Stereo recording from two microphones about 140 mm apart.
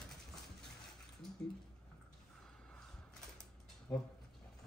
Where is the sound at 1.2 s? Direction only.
Centre (ahead or behind).